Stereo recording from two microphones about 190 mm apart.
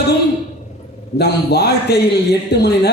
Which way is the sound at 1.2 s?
60° left (ahead or behind).